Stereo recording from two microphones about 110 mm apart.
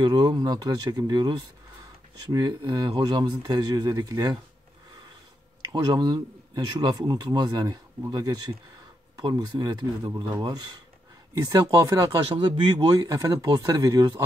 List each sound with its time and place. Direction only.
0.0 s speech: 40° right (ahead or behind)
5.7 s speech: 35° right (ahead or behind)
12.4 s speech: 40° right (ahead or behind)